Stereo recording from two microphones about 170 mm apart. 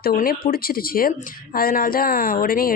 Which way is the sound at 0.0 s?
60° left (ahead or behind).